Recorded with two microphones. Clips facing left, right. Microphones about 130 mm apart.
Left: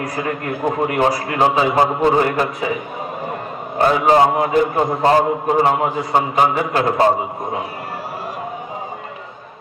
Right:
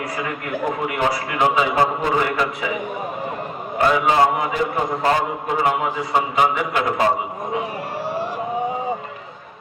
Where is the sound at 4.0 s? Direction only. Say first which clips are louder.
Left 4 dB; 35° left (ahead or behind).